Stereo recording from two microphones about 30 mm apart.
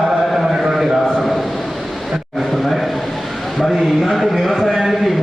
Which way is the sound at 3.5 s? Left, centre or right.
Centre.